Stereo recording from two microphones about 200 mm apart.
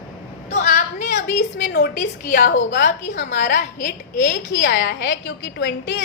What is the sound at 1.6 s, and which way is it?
Speech, 55° left (ahead or behind).